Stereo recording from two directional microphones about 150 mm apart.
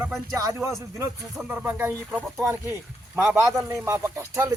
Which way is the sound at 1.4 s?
10° right (ahead or behind).